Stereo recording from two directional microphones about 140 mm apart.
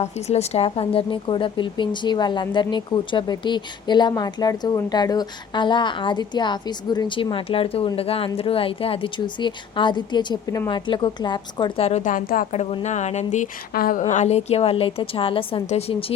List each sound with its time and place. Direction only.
0.0 s a woman's voice: 50° left (ahead or behind); by 11.7 s 30° left (ahead or behind)
11.8 s a woman's voice: 50° left (ahead or behind)
12.1 s speech: 85° left
12.5 s speech: 55° left (ahead or behind); by 14.0 s 80° left
14.0 s a woman's voice: 55° left (ahead or behind)